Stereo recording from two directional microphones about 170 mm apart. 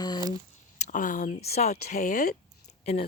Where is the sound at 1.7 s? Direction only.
65° left (ahead or behind).